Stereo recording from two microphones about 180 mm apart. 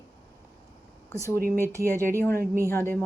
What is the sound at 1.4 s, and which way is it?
Speech, 55° right (ahead or behind).